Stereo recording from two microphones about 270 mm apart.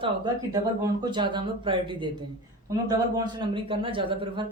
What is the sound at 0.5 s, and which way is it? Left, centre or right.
Speech, centre.